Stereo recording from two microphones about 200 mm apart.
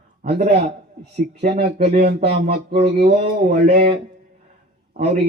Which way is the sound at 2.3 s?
55° right (ahead or behind).